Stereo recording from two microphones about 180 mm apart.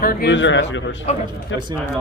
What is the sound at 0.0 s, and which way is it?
Speech, 75° left (ahead or behind).